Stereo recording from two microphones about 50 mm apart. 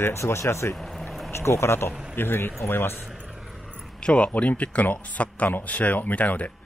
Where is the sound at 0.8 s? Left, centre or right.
Centre.